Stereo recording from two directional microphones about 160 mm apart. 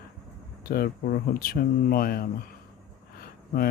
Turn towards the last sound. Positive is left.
turn(degrees=70)  # may be behind; listen again after turning